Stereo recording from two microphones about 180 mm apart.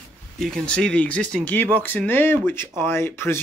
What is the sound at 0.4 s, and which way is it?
Speech, 5° left (ahead or behind).